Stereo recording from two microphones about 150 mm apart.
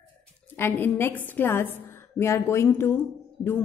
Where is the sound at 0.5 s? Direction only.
15° left (ahead or behind).